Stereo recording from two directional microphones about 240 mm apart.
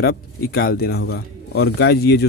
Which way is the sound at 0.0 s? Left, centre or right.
Left.